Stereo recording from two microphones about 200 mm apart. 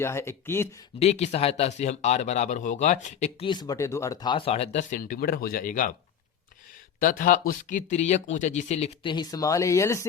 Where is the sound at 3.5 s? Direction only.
20° left (ahead or behind); by 5.9 s 45° left (ahead or behind).